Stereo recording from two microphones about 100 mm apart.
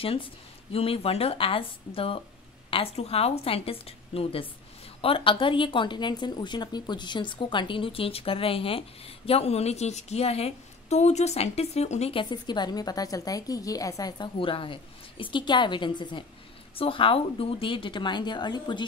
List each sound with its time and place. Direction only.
0.0 s a woman's voice: 70° left (ahead or behind); by 16.3 s 50° left (ahead or behind)
16.7 s speech: 65° left (ahead or behind); by 18.9 s 50° left (ahead or behind)